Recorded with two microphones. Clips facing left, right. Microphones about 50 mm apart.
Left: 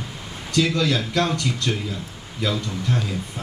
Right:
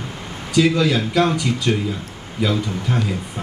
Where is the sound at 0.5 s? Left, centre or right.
Centre.